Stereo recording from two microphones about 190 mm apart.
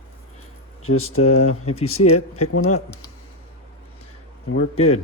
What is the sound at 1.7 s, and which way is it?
Speech, 30° left (ahead or behind).